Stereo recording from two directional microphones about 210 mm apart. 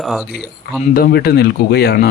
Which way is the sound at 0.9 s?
45° left (ahead or behind).